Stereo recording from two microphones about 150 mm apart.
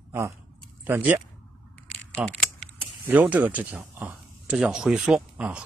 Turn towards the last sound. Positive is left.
turn(degrees=-5)  # may be behind; listen again after turning